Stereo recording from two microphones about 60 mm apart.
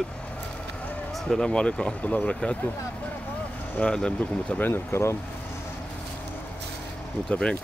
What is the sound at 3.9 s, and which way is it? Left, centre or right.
Speech, centre.